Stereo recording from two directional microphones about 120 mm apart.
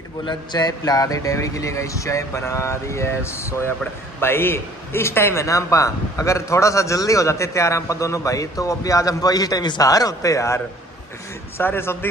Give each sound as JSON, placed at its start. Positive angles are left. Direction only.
{"t": 0.2, "sound": "a man's voice", "side_deg": 35}